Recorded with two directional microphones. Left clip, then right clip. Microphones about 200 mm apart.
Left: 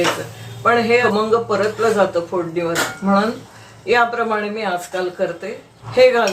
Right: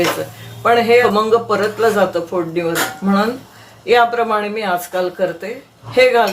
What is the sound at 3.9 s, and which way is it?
Speech, 40° right (ahead or behind).